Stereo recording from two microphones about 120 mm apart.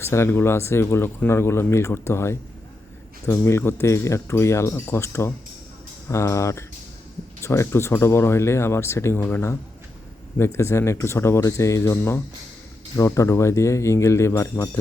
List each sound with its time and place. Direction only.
0.0 s speech: 20° left (ahead or behind)